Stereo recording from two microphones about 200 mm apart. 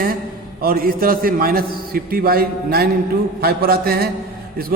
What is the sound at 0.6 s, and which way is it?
A man's voice, 45° right (ahead or behind).